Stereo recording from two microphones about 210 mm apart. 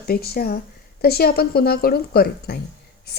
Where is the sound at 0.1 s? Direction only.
45° left (ahead or behind).